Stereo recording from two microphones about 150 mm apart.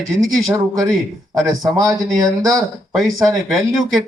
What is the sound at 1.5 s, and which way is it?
Speech, 25° right (ahead or behind).